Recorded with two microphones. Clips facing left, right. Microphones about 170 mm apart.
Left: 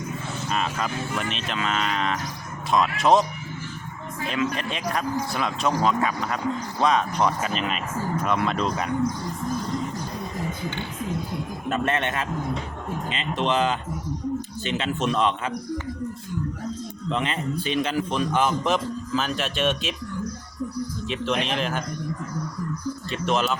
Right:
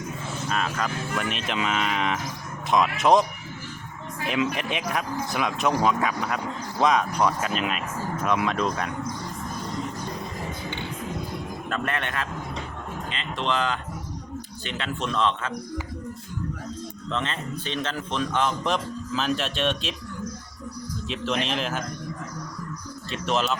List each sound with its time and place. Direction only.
0.4 s speech: centre (ahead or behind)
1.3 s speech: 15° right (ahead or behind)
4.3 s speech: 15° right (ahead or behind)
11.7 s a man's voice: 20° left (ahead or behind)
17.1 s a man's voice: 15° left (ahead or behind)
21.1 s speech: centre (ahead or behind)
23.1 s speech: centre (ahead or behind)